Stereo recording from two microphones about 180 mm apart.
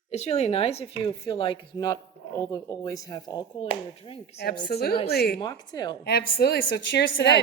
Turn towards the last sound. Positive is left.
turn(degrees=70)  # may be behind; listen again after turning